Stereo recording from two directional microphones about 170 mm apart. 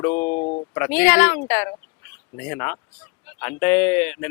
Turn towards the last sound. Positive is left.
turn(degrees=10)  # may be behind; listen again after turning